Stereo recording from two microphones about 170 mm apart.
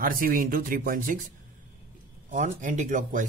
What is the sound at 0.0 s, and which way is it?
Speech, 55° right (ahead or behind).